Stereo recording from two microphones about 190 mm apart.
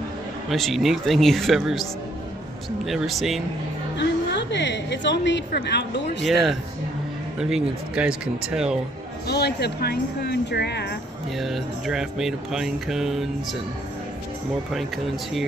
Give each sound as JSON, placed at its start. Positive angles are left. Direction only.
{"t": 0.5, "sound": "speech", "side_deg": 0}
{"t": 2.8, "sound": "speech", "side_deg": 0}
{"t": 4.0, "sound": "a woman's voice", "side_deg": 65}
{"t": 7.3, "sound": "speech", "side_deg": -5}
{"t": 9.3, "sound": "a woman's voice", "side_deg": 60}
{"t": 11.3, "sound": "speech", "side_deg": 0}